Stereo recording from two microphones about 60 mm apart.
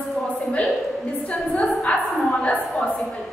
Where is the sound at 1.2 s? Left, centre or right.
Centre.